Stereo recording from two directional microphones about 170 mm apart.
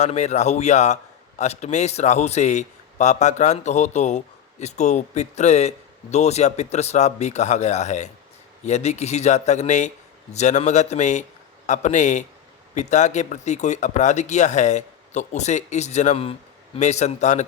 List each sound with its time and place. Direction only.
0.0 s a man's voice: 40° left (ahead or behind)